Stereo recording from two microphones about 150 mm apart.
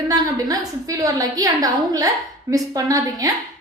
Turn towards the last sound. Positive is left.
turn(degrees=-25)  # may be behind; listen again after turning